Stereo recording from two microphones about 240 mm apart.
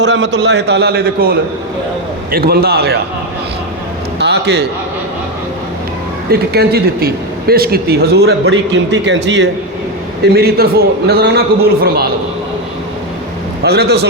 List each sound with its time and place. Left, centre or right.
0.0 s a man's voice: right
4.2 s a man's voice: right
6.3 s speech: right
13.6 s a man's voice: right